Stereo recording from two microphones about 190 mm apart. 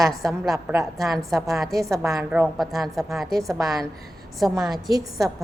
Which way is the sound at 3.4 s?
15° right (ahead or behind).